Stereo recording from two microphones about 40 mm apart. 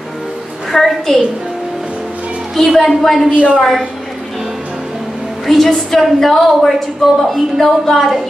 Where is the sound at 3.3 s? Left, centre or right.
Right.